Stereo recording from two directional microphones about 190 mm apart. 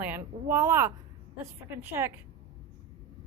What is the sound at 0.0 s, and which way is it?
A woman's voice, 10° right (ahead or behind).